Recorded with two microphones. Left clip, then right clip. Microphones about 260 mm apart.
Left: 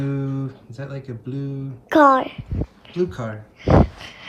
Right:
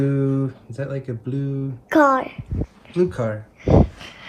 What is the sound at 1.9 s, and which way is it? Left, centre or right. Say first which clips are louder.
Speech: left 2 dB; left.